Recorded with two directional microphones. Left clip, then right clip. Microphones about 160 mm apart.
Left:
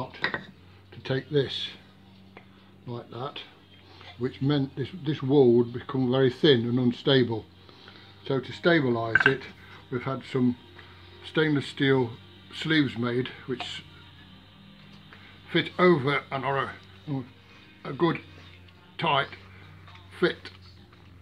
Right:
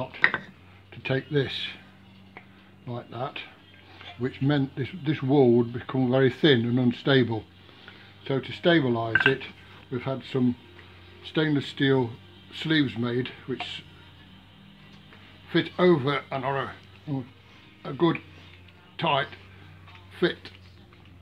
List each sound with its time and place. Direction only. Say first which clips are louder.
1.0 s speech: even; 30° right (ahead or behind)
2.9 s speech: right 2 dB; 30° right (ahead or behind)
15.5 s speech: even; 25° right (ahead or behind)